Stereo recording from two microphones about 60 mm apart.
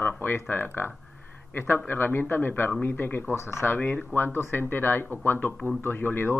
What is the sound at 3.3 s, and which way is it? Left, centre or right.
Speech, left.